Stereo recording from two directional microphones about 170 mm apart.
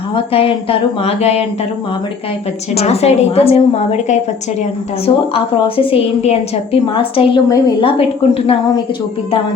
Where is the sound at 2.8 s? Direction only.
40° left (ahead or behind).